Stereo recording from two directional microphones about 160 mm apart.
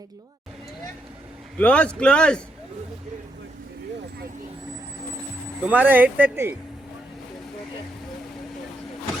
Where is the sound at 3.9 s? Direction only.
85° right.